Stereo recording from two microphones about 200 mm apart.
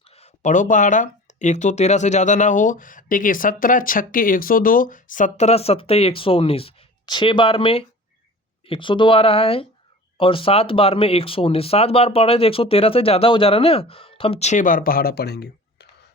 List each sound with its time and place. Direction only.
0.1 s speech: 30° left (ahead or behind); by 15.9 s 55° left (ahead or behind)